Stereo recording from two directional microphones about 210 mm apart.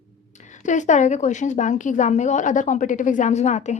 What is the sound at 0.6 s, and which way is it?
A woman's voice, 35° left (ahead or behind).